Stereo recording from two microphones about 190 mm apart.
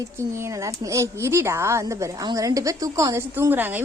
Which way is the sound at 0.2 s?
15° right (ahead or behind).